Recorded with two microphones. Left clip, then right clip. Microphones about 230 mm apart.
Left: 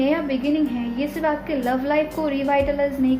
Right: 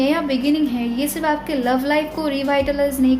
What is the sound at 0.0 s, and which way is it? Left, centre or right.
A woman's voice, right.